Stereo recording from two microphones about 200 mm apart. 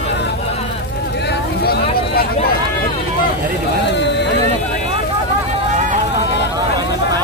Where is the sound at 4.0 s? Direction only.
60° left (ahead or behind).